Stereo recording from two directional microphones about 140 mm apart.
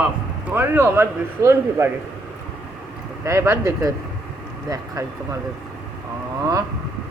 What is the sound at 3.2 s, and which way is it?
Speech, 20° right (ahead or behind).